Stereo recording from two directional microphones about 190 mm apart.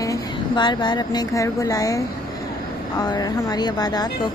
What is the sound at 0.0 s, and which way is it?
A woman's voice, 20° left (ahead or behind).